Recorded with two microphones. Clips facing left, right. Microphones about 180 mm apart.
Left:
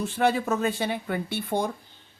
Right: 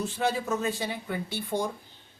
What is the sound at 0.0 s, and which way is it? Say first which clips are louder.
A woman's voice: left 4 dB; 60° left (ahead or behind).